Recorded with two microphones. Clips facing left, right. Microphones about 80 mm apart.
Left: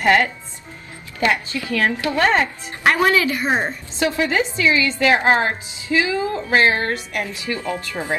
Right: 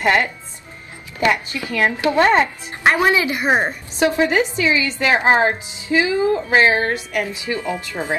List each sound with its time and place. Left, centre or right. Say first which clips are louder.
0.0 s a woman's voice: left 1 dB; right